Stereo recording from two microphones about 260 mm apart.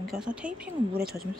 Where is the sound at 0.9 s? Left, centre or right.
Right.